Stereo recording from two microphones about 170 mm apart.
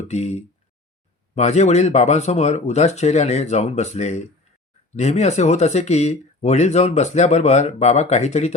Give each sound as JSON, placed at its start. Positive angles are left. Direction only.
{"t": 0.1, "sound": "speech", "side_deg": 40}